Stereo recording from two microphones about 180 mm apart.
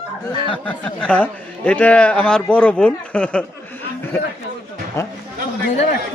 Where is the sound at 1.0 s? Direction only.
5° left (ahead or behind).